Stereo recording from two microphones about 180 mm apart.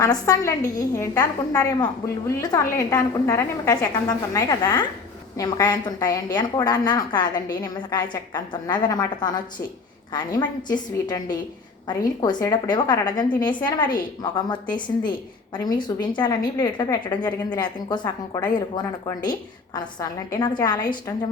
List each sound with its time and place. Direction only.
0.0 s a woman's voice: 20° left (ahead or behind)